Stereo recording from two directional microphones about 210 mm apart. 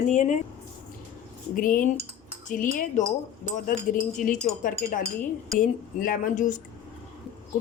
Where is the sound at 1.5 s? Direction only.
40° left (ahead or behind).